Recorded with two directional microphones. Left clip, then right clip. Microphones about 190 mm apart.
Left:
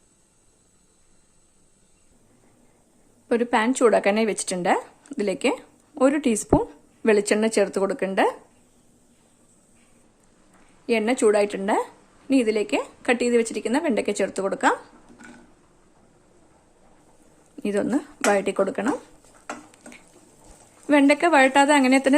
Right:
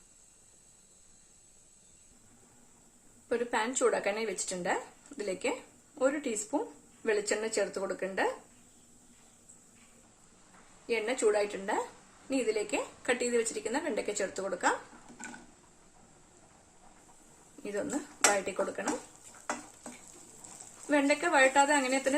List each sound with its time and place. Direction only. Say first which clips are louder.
3.2 s speech: left 10 dB; 45° left (ahead or behind)
10.8 s speech: left 9 dB; 55° left (ahead or behind)
17.6 s speech: left 11 dB; 55° left (ahead or behind)
20.8 s speech: left 10 dB; 55° left (ahead or behind)